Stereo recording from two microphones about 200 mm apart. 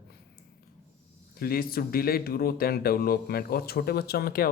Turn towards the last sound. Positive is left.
turn(degrees=50)  # may be behind; listen again after turning